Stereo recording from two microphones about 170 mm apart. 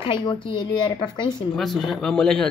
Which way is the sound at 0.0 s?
30° left (ahead or behind).